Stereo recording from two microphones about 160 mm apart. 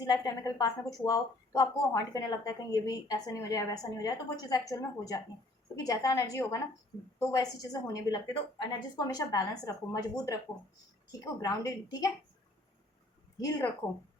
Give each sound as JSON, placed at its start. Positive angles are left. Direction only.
{"t": 0.0, "sound": "a woman's voice", "side_deg": 25}
{"t": 11.3, "sound": "a woman's voice", "side_deg": 20}